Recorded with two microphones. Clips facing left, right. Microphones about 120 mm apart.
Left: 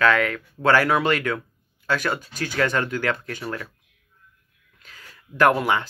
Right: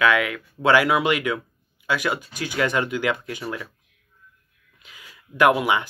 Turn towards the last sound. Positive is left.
turn(degrees=-10)  # may be behind; listen again after turning